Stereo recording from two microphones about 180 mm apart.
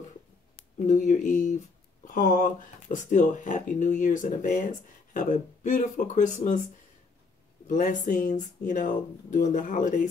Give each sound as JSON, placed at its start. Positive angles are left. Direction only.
{"t": 0.7, "sound": "speech", "side_deg": 45}
{"t": 7.6, "sound": "speech", "side_deg": 45}